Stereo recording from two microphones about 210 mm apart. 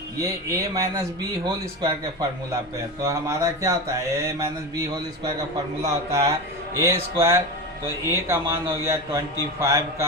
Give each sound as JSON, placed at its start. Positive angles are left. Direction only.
{"t": 0.2, "sound": "a man's voice", "side_deg": -15}
{"t": 3.0, "sound": "a man's voice", "side_deg": -15}
{"t": 5.8, "sound": "a man's voice", "side_deg": -15}